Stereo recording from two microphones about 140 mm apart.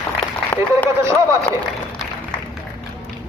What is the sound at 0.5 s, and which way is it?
Speech, 15° left (ahead or behind).